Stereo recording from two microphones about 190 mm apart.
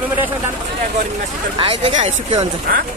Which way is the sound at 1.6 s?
30° right (ahead or behind).